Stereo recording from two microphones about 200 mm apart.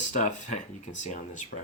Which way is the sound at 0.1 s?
40° left (ahead or behind).